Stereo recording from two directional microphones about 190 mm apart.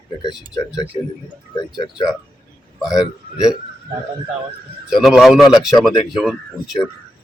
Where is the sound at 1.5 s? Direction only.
25° left (ahead or behind).